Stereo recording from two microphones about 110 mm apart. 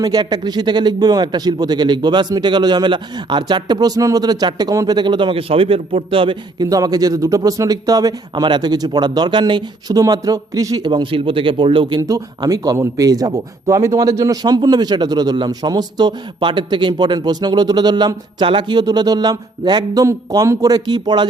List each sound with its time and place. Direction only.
0.0 s a man's voice: 40° right (ahead or behind)
4.9 s a man's voice: 45° right (ahead or behind)
6.7 s a man's voice: 35° right (ahead or behind)